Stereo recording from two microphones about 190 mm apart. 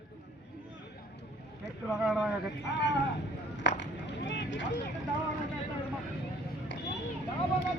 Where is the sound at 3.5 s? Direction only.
70° left (ahead or behind).